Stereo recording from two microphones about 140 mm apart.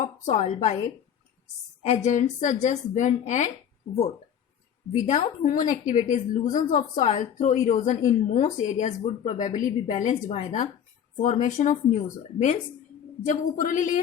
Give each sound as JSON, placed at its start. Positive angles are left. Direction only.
{"t": 0.0, "sound": "a woman's voice", "side_deg": 55}
{"t": 2.0, "sound": "a woman's voice", "side_deg": 60}
{"t": 4.9, "sound": "a woman's voice", "side_deg": 55}